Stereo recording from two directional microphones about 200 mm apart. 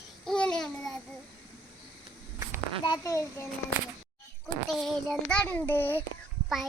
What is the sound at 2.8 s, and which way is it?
Speech, 20° left (ahead or behind).